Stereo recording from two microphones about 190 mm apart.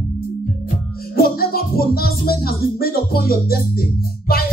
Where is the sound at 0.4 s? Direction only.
50° left (ahead or behind).